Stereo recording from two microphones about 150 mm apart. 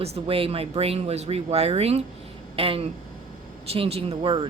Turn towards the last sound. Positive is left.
turn(degrees=-35)  # may be behind; listen again after turning